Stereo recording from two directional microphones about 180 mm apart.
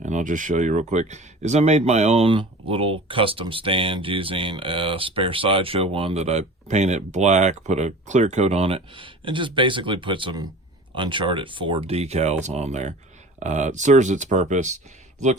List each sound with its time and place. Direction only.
0.0 s speech: 45° right (ahead or behind)